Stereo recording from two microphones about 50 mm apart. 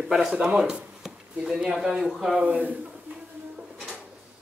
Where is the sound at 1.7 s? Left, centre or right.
Centre.